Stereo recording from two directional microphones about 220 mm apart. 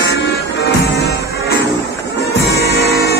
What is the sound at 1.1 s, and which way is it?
Music, 50° left (ahead or behind).